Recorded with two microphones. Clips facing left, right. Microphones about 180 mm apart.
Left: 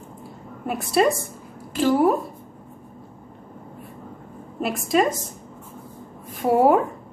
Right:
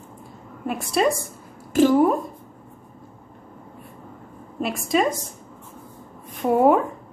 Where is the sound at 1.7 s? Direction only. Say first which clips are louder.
Right 5 dB; 45° right (ahead or behind).